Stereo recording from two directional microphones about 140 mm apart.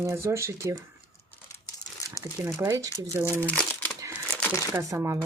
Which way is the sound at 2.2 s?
25° right (ahead or behind).